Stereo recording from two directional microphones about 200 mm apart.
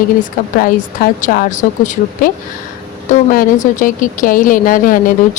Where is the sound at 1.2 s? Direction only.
40° left (ahead or behind).